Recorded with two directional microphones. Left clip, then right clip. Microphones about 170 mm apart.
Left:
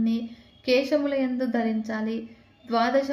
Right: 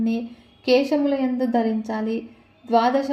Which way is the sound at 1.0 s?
5° right (ahead or behind).